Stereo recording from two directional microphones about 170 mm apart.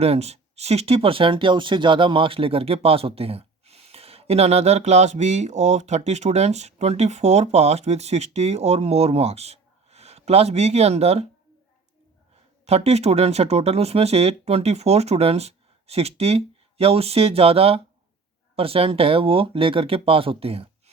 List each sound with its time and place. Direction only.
0.0 s speech: 40° right (ahead or behind)
12.6 s speech: 40° right (ahead or behind)